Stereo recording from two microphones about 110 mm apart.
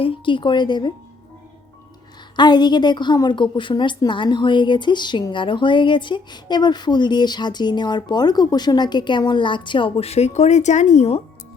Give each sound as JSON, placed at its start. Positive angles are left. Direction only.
{"t": 0.0, "sound": "a woman's voice", "side_deg": 55}
{"t": 2.3, "sound": "a woman's voice", "side_deg": 40}